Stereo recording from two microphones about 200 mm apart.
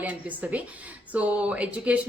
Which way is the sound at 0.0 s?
10° right (ahead or behind).